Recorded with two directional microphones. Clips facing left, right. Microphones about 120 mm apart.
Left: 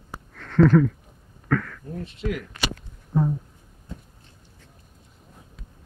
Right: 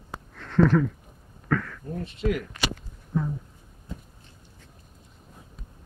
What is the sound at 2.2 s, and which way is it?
Speech, 25° right (ahead or behind).